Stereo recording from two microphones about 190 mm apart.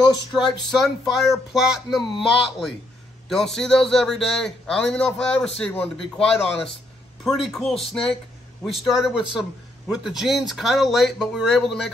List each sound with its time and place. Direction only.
0.7 s speech: centre (ahead or behind)